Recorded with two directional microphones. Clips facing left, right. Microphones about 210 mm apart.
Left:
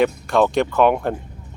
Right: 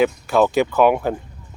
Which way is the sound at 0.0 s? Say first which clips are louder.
Right 1 dB; 5° right (ahead or behind).